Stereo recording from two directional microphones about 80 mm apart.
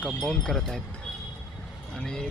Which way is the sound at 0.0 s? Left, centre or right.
Centre.